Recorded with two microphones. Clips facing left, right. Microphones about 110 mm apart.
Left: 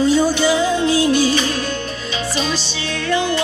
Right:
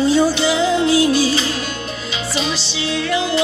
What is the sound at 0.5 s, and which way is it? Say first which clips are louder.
Music: right 1 dB; 35° left (ahead or behind).